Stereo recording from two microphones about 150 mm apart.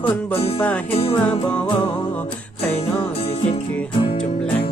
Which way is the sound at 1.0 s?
40° left (ahead or behind).